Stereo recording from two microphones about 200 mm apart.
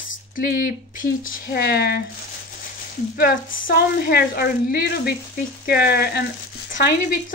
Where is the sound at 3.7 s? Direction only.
50° left (ahead or behind).